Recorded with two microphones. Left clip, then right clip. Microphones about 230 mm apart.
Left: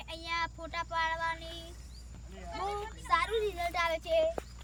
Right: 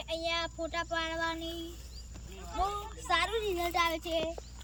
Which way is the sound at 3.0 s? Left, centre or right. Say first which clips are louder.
Even; centre.